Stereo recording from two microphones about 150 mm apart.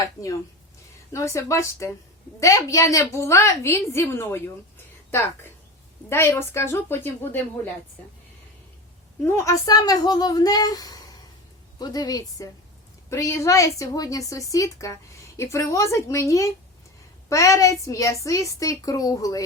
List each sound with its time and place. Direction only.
0.0 s a woman's voice: 20° left (ahead or behind)
6.1 s a woman's voice: 15° left (ahead or behind)
9.2 s a woman's voice: 20° left (ahead or behind)